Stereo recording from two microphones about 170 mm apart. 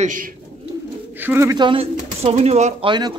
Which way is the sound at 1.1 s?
10° right (ahead or behind).